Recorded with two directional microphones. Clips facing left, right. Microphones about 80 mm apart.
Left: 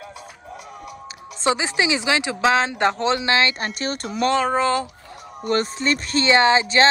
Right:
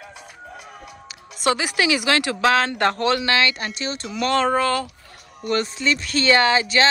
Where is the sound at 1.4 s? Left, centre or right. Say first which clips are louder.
Even; left.